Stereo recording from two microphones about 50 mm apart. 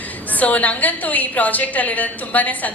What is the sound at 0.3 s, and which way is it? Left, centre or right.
A woman's voice, left.